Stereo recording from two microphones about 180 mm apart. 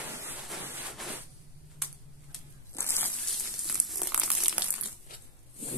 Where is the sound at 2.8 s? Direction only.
15° left (ahead or behind).